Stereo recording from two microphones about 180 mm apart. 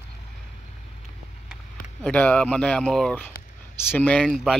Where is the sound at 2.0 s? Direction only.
5° left (ahead or behind).